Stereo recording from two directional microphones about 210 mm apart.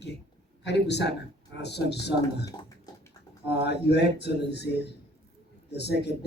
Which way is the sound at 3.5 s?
50° left (ahead or behind).